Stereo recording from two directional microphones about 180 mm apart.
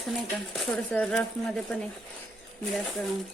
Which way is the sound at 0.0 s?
Centre (ahead or behind).